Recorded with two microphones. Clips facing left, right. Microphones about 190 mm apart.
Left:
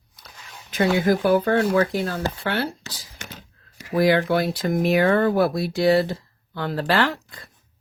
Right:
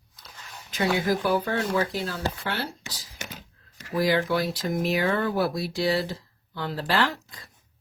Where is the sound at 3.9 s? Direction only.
60° left (ahead or behind).